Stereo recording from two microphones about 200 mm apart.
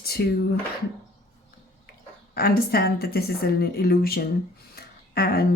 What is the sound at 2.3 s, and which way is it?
A woman's voice, 50° left (ahead or behind).